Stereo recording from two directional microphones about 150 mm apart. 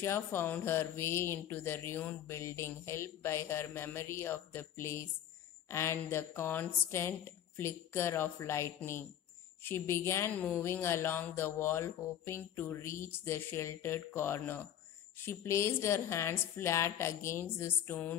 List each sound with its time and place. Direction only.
0.0 s speech: 15° left (ahead or behind)